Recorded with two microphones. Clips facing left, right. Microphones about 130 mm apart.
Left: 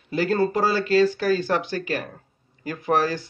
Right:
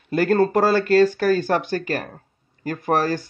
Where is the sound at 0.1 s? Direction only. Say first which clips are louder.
Right 4 dB; 55° right (ahead or behind).